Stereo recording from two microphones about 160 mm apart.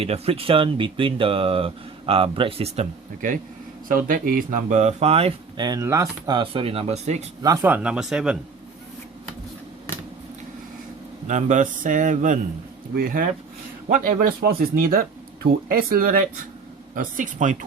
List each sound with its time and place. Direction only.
0.0 s speech: 35° right (ahead or behind)
3.8 s speech: 60° right (ahead or behind); by 5.3 s 40° right (ahead or behind)
5.5 s speech: 25° right (ahead or behind); by 7.2 s 45° right (ahead or behind)
7.4 s speech: 15° right (ahead or behind)
11.3 s speech: 50° right (ahead or behind)
12.9 s speech: 65° right (ahead or behind)